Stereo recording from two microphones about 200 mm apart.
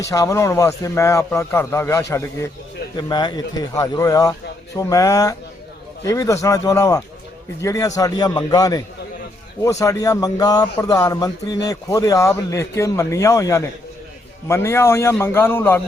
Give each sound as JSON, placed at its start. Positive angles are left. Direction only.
{"t": 0.1, "sound": "speech", "side_deg": 15}